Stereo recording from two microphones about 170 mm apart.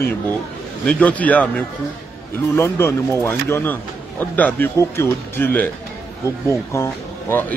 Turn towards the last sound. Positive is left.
turn(degrees=10)  # may be behind; listen again after turning